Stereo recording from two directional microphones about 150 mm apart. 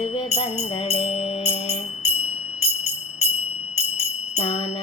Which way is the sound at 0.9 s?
40° left (ahead or behind).